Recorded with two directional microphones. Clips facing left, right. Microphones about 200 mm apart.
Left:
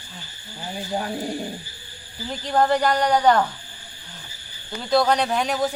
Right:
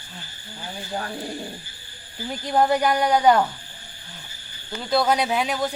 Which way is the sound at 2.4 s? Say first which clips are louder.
Even; 10° right (ahead or behind).